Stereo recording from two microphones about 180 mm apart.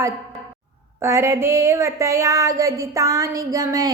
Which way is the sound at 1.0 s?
15° right (ahead or behind).